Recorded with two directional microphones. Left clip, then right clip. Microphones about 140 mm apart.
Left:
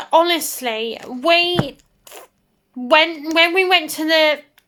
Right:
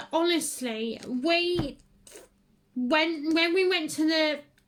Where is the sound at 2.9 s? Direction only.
20° right (ahead or behind).